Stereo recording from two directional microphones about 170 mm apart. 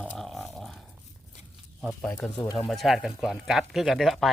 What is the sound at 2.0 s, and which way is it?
Speech, 5° left (ahead or behind).